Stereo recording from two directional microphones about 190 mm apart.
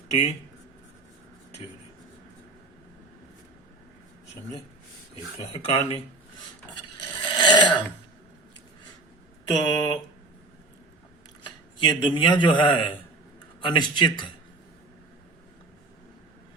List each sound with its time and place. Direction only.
5.5 s speech: 30° left (ahead or behind)
6.9 s snoring: 25° left (ahead or behind)
9.5 s a man's voice: 20° left (ahead or behind)
11.8 s a man's voice: 25° left (ahead or behind)